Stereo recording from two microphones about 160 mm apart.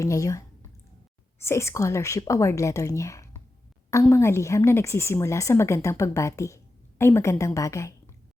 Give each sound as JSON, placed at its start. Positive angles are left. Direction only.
{"t": 0.0, "sound": "a woman's voice", "side_deg": 20}